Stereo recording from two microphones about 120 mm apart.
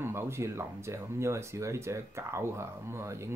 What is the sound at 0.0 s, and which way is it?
Speech, 20° right (ahead or behind).